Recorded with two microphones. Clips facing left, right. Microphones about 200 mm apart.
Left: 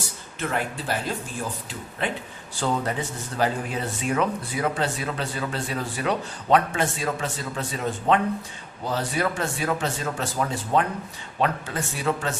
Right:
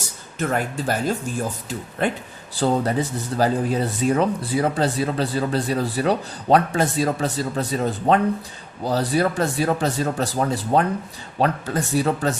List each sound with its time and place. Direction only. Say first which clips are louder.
0.3 s speech: right 5 dB; 45° right (ahead or behind)